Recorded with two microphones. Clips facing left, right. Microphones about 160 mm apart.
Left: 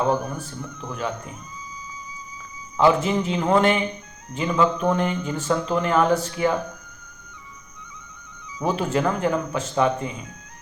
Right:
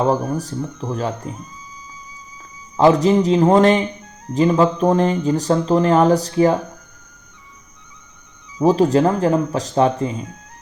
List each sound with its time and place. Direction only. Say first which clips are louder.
0.1 s speech: right 5 dB; 35° right (ahead or behind)
2.7 s speech: right 6 dB; 40° right (ahead or behind)
8.5 s speech: right 9 dB; 35° right (ahead or behind)